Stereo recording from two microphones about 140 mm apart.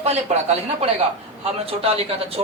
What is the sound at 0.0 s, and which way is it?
A man's voice, 50° right (ahead or behind).